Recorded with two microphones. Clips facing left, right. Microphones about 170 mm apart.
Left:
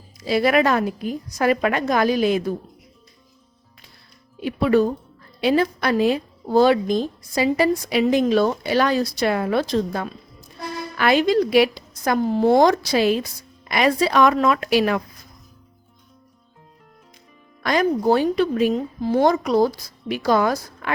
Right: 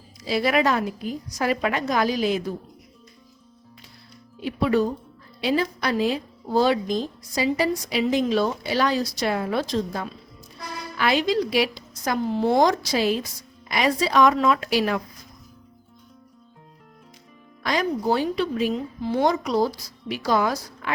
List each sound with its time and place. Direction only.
0.3 s a woman's voice: 55° left (ahead or behind)
4.4 s a woman's voice: 55° left (ahead or behind)
17.6 s a woman's voice: 55° left (ahead or behind)